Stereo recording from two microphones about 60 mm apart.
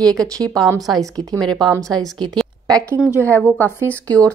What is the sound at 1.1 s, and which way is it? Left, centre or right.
Speech, right.